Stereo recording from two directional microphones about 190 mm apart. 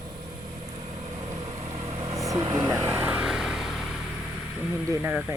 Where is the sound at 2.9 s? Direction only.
5° right (ahead or behind).